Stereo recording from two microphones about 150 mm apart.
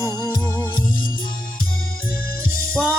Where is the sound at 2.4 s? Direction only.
70° left (ahead or behind).